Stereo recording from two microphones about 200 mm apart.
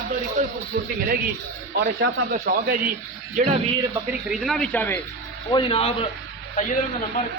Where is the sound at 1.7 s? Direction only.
50° right (ahead or behind).